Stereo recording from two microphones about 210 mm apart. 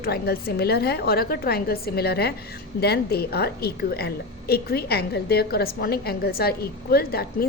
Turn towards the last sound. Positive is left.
turn(degrees=45)  # may be behind; listen again after turning